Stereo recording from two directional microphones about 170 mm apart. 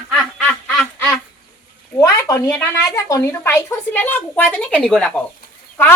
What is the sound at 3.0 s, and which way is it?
A woman's voice, 20° left (ahead or behind).